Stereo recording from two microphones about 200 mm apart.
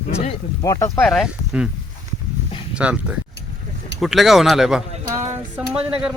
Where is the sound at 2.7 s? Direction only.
5° right (ahead or behind).